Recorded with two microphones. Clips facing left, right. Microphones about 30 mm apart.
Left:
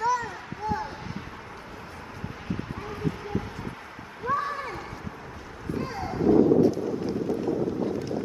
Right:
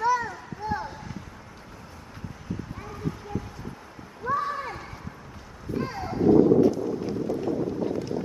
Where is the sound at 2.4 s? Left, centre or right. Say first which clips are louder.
Left 2 dB; left.